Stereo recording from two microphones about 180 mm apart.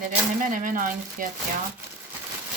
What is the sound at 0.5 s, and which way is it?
Speech, 50° right (ahead or behind).